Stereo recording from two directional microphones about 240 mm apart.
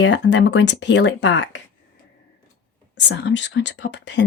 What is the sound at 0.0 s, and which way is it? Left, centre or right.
Speech, left.